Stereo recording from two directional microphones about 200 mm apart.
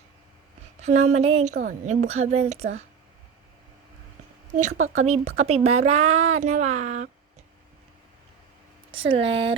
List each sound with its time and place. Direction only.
0.8 s speech: 35° right (ahead or behind)
1.6 s a woman's voice: 45° right (ahead or behind)
1.9 s speech: 35° right (ahead or behind)
4.7 s speech: 90° right
5.0 s speech: 35° right (ahead or behind)
8.9 s speech: 25° right (ahead or behind)